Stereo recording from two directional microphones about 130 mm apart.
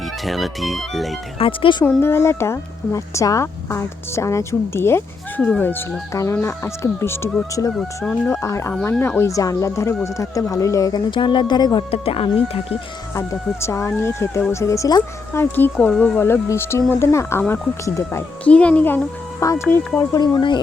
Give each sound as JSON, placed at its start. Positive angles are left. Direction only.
{"t": 0.3, "sound": "speech", "side_deg": 0}
{"t": 1.4, "sound": "speech", "side_deg": 40}
{"t": 2.0, "sound": "speech", "side_deg": 20}
{"t": 7.8, "sound": "speech", "side_deg": 5}
{"t": 8.3, "sound": "speech", "side_deg": 20}
{"t": 11.1, "sound": "speech", "side_deg": 40}
{"t": 11.9, "sound": "speech", "side_deg": 45}
{"t": 13.1, "sound": "speech", "side_deg": 20}
{"t": 15.3, "sound": "speech", "side_deg": 15}
{"t": 15.8, "sound": "speech", "side_deg": 5}
{"t": 16.1, "sound": "speech", "side_deg": 15}
{"t": 18.4, "sound": "speech", "side_deg": 10}
{"t": 19.4, "sound": "speech", "side_deg": 25}